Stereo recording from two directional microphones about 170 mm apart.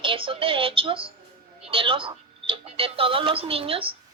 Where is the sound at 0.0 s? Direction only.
30° right (ahead or behind).